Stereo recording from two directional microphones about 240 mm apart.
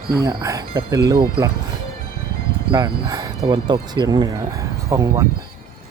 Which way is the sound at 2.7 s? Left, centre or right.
Centre.